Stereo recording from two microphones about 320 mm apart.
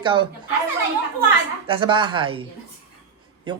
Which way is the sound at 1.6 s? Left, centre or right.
Centre.